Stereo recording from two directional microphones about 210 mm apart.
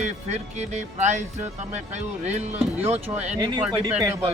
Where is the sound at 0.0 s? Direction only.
30° right (ahead or behind).